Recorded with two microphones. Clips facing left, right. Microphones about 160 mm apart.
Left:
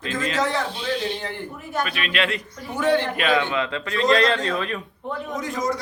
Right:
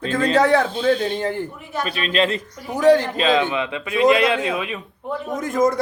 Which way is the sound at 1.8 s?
35° right (ahead or behind).